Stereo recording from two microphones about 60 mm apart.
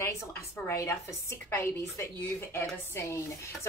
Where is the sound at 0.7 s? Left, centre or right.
Left.